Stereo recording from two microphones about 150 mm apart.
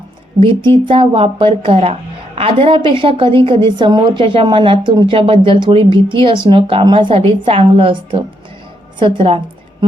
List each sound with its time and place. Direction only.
0.3 s a woman's voice: 35° right (ahead or behind)